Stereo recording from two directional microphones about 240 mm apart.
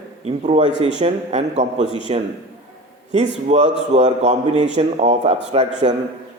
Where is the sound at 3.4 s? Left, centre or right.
Right.